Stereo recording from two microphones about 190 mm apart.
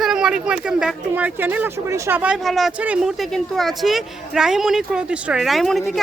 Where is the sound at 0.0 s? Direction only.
5° right (ahead or behind).